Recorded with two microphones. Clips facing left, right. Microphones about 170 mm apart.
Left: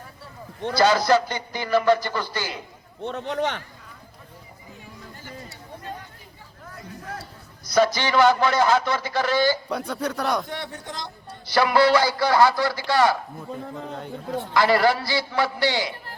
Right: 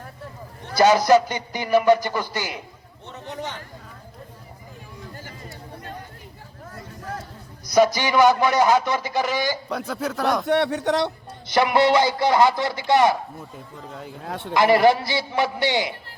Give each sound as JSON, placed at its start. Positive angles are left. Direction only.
{"t": 0.8, "sound": "speech", "side_deg": -20}
{"t": 3.0, "sound": "a man's voice", "side_deg": 70}
{"t": 5.1, "sound": "a sound", "side_deg": -45}
{"t": 7.9, "sound": "speech", "side_deg": -15}
{"t": 9.6, "sound": "speech", "side_deg": 0}
{"t": 10.4, "sound": "speech", "side_deg": -75}
{"t": 11.4, "sound": "a man's voice", "side_deg": -20}
{"t": 14.5, "sound": "a man's voice", "side_deg": -20}